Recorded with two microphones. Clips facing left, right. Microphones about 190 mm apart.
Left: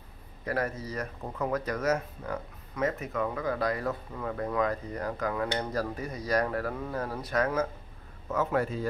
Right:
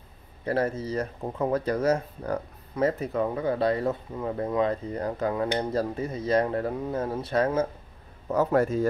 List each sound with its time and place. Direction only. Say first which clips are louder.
0.5 s a man's voice: right 5 dB; 30° right (ahead or behind); by 8.8 s 45° right (ahead or behind)